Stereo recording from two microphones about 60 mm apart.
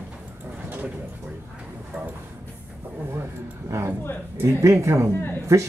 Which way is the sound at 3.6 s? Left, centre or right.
Right.